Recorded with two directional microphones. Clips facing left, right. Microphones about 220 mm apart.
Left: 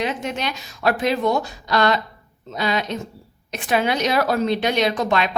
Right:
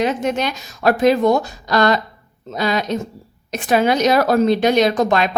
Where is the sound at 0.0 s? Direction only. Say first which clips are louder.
Right 6 dB; 45° right (ahead or behind).